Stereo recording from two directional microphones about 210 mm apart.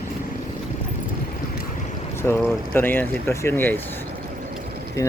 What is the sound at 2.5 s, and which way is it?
Speech, 10° left (ahead or behind).